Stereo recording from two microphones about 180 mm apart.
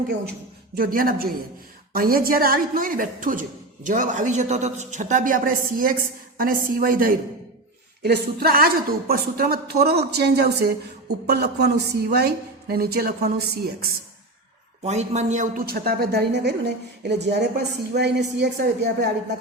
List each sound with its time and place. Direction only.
0.8 s a woman's voice: 55° right (ahead or behind)
8.0 s a woman's voice: 60° right (ahead or behind)
14.8 s a woman's voice: 40° right (ahead or behind); by 19.0 s 70° right (ahead or behind)